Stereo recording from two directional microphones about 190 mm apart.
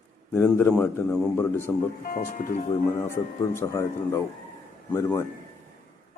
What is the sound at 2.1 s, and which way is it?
Speech, 45° left (ahead or behind).